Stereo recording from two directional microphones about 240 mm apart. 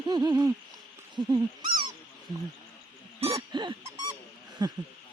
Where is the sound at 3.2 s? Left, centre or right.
Right.